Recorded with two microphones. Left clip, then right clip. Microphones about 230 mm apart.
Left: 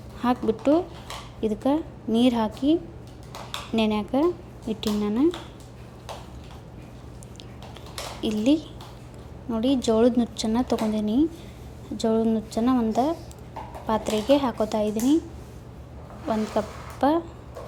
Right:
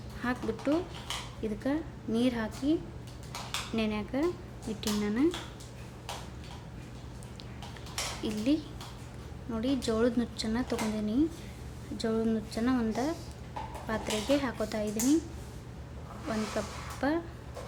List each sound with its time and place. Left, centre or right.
0.2 s a woman's voice: centre
3.8 s a woman's voice: centre
8.2 s a woman's voice: centre
16.3 s a woman's voice: centre